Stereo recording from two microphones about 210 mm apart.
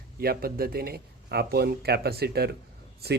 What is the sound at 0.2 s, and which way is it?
Speech, 45° right (ahead or behind).